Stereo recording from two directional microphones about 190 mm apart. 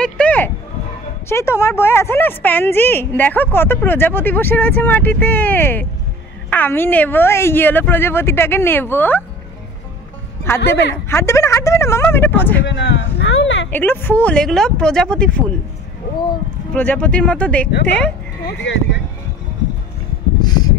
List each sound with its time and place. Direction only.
0.0 s a sound: 5° left (ahead or behind)
1.3 s speech: 15° left (ahead or behind)
10.4 s speech: 15° left (ahead or behind)
12.6 s speech: 70° left (ahead or behind)
13.2 s a sound: 75° left (ahead or behind)
13.7 s speech: 10° left (ahead or behind)
16.7 s speech: 10° left (ahead or behind)
18.4 s speech: 65° left (ahead or behind)
20.4 s a sound: 20° left (ahead or behind)